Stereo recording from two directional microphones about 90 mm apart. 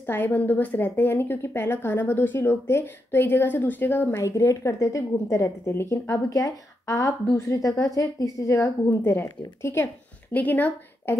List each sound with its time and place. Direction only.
0.0 s a woman's voice: 20° left (ahead or behind)
4.2 s a woman's voice: 35° left (ahead or behind); by 11.1 s 20° left (ahead or behind)